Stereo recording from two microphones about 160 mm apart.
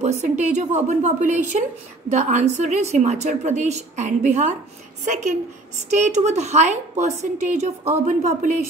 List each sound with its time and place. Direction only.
0.0 s a woman's voice: 45° right (ahead or behind)